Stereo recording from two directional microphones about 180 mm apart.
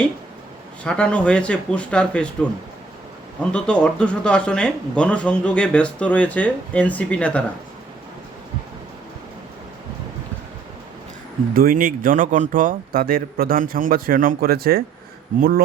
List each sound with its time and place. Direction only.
0.9 s speech: 5° left (ahead or behind)
3.5 s speech: 5° left (ahead or behind)
11.5 s a man's voice: 50° right (ahead or behind)